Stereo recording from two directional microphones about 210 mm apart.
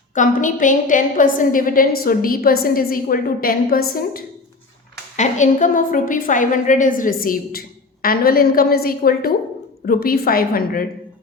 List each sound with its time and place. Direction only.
0.1 s a woman's voice: 35° left (ahead or behind)